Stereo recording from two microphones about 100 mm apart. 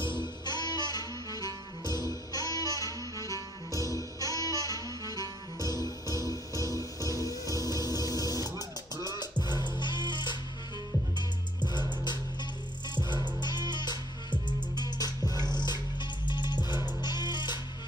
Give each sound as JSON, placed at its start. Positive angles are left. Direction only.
{"t": 0.5, "sound": "music", "side_deg": 45}